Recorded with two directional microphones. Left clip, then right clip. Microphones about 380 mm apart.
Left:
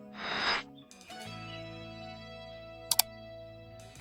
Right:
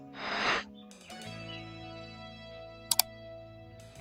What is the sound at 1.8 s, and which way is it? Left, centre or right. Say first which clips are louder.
Music: even; centre.